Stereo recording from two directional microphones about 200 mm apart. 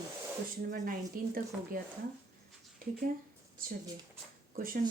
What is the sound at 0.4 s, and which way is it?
Speech, 45° right (ahead or behind).